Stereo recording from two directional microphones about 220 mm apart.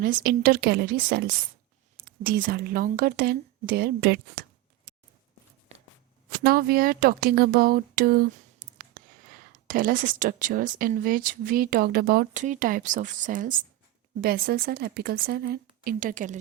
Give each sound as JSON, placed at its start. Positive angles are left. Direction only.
{"t": 0.0, "sound": "a woman's voice", "side_deg": -40}
{"t": 6.4, "sound": "a woman's voice", "side_deg": -45}